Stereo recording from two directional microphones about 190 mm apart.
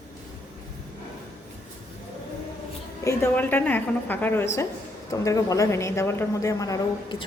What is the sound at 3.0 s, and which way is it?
A woman's voice, 15° left (ahead or behind).